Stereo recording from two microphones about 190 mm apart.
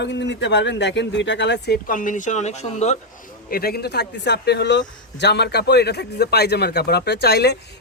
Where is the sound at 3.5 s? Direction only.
55° left (ahead or behind).